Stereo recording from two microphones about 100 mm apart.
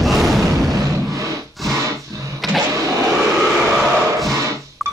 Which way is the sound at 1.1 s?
35° right (ahead or behind).